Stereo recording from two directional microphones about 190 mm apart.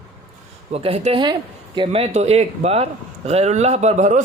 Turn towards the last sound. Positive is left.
turn(degrees=-35)  # may be behind; listen again after turning